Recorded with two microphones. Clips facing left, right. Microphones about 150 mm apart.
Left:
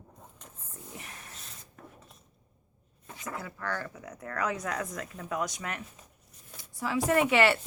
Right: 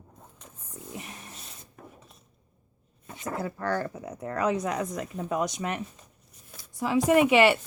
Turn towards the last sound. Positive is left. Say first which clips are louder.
# right 5 dB
turn(degrees=-15)  # may be behind; listen again after turning